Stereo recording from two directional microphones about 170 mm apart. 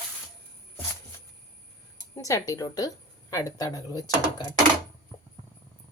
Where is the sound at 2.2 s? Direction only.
20° left (ahead or behind).